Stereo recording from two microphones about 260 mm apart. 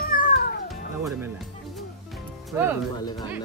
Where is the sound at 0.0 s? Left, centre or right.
Left.